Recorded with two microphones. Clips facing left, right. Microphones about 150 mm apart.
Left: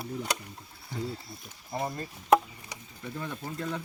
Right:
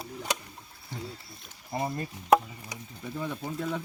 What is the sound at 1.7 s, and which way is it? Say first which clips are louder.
Speech: right 2 dB; 5° right (ahead or behind).